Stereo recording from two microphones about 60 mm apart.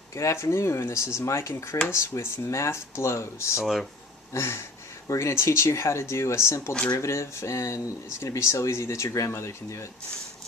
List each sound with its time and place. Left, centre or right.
0.2 s speech: left